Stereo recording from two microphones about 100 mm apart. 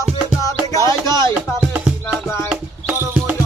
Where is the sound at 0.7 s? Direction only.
30° left (ahead or behind).